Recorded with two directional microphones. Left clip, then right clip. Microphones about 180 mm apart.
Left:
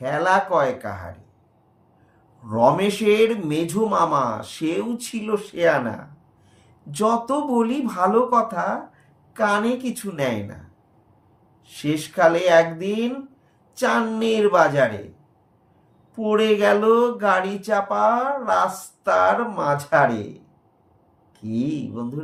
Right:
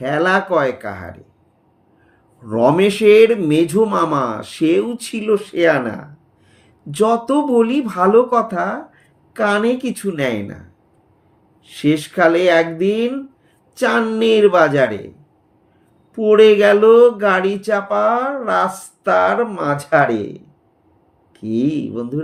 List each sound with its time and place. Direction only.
0.0 s a man's voice: 55° right (ahead or behind)
2.5 s a man's voice: 55° right (ahead or behind)
11.6 s a man's voice: 55° right (ahead or behind)
16.1 s a man's voice: 55° right (ahead or behind)
21.3 s speech: 55° right (ahead or behind)